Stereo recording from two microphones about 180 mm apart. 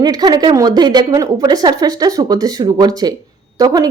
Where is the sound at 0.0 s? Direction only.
20° right (ahead or behind).